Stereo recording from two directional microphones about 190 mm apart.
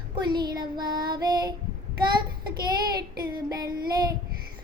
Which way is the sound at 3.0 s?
55° right (ahead or behind).